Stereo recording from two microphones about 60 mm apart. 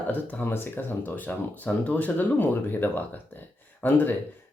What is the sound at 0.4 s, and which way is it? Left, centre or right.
Speech, left.